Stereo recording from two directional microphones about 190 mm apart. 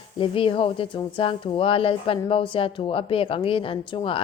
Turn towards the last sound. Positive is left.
turn(degrees=25)  # may be behind; listen again after turning